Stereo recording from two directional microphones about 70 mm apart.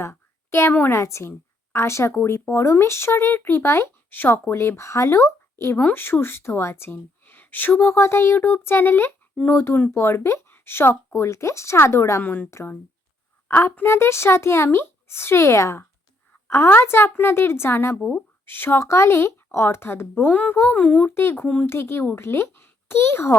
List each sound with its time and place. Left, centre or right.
0.0 s a sound: left
0.7 s a woman's voice: left
0.9 s speech: left
5.7 s speech: left
12.2 s a woman's voice: left
12.5 s a woman's voice: left
20.3 s a woman's voice: left
21.2 s speech: left
21.4 s speech: centre
21.7 s speech: left